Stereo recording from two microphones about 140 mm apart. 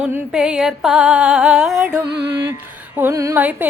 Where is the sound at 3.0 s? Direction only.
20° right (ahead or behind).